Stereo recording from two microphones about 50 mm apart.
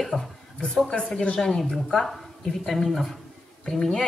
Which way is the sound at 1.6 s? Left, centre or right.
Centre.